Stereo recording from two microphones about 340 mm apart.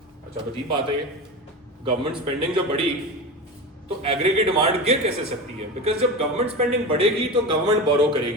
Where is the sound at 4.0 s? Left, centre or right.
Centre.